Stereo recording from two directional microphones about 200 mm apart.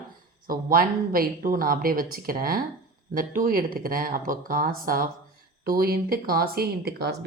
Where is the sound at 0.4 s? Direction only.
45° right (ahead or behind).